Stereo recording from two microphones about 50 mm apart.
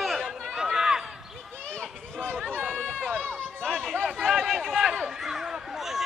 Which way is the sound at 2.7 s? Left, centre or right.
Left.